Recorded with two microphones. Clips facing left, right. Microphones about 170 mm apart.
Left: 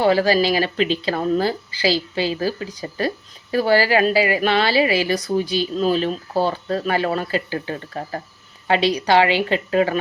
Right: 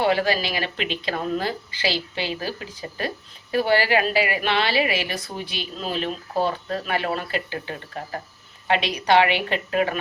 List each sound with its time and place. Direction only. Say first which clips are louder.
0.0 s a woman's voice: left 5 dB; 35° left (ahead or behind)